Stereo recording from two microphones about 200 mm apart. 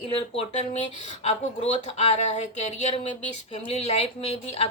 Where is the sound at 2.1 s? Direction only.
35° left (ahead or behind).